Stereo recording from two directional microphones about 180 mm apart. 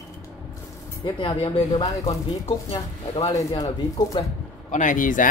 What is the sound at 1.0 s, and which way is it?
Speech, 25° left (ahead or behind).